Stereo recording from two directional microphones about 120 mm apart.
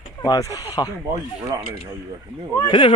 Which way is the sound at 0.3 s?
30° left (ahead or behind).